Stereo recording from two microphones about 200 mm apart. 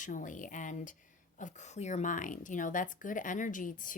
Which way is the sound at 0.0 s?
40° left (ahead or behind).